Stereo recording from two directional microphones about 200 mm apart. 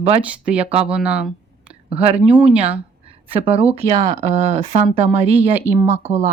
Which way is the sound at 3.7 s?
30° right (ahead or behind).